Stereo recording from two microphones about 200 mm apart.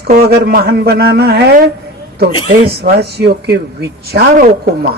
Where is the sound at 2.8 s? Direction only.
55° right (ahead or behind).